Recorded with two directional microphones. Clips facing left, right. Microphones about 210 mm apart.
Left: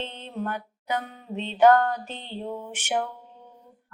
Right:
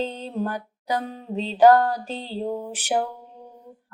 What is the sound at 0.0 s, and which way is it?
Music, 35° right (ahead or behind).